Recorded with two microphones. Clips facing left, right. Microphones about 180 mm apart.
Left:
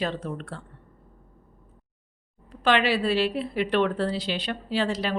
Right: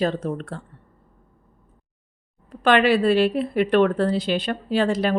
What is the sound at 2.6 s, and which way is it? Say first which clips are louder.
A woman's voice: right 5 dB; 50° right (ahead or behind).